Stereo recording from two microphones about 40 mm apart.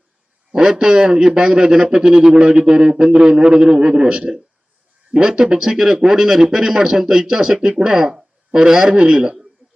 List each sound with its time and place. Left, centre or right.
0.5 s a man's voice: centre